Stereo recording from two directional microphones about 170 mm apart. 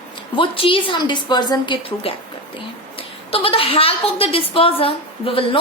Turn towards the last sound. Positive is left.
turn(degrees=30)  # may be behind; listen again after turning